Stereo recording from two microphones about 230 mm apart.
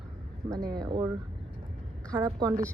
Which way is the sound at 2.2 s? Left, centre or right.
Centre.